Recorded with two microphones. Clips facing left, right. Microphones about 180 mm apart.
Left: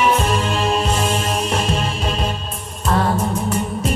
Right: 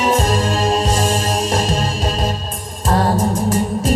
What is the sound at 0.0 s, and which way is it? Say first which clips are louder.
Music: right 1 dB; 40° right (ahead or behind).